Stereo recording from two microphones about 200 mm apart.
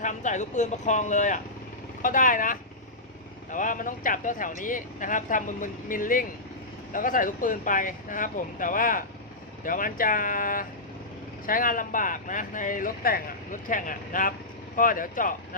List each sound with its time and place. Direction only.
0.0 s speech: 40° left (ahead or behind)